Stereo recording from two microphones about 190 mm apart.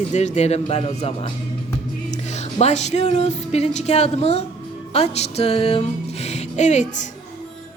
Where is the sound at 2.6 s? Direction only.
35° left (ahead or behind).